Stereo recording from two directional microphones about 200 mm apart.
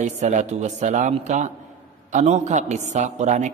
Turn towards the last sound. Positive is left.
turn(degrees=-35)  # may be behind; listen again after turning